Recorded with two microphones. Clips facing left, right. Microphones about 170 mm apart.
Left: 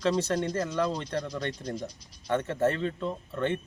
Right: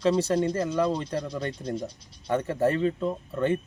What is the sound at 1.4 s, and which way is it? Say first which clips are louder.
Speech: right 3 dB; 30° right (ahead or behind).